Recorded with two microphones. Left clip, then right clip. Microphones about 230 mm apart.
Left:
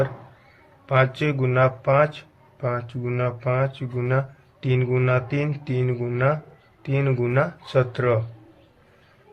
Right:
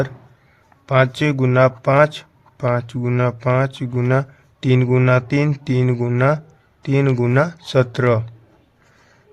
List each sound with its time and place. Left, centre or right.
0.9 s speech: right